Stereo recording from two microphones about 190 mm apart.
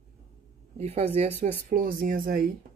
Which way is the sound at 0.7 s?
35° right (ahead or behind).